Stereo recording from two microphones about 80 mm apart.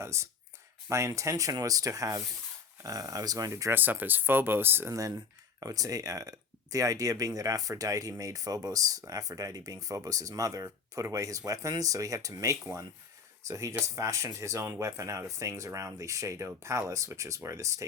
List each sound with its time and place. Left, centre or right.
0.0 s speech: right
3.7 s speech: right
5.5 s speech: right